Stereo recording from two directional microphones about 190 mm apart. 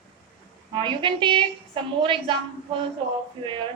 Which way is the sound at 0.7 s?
25° right (ahead or behind).